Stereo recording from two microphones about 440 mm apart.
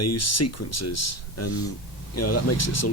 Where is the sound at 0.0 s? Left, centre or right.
Left.